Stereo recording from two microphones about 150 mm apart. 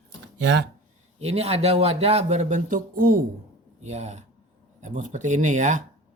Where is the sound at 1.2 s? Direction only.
45° right (ahead or behind); by 3.2 s 75° right (ahead or behind).